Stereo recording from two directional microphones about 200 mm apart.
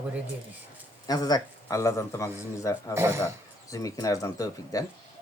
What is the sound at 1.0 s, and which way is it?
A man's voice, 20° left (ahead or behind).